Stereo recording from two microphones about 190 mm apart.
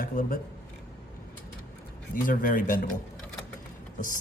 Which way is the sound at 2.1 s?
45° left (ahead or behind).